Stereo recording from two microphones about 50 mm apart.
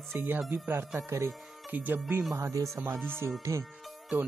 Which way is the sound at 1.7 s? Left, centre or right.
Right.